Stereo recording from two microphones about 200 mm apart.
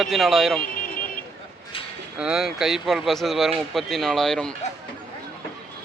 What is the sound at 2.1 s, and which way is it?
Speech, 5° right (ahead or behind).